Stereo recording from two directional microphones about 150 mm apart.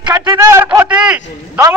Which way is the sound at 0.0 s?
20° right (ahead or behind).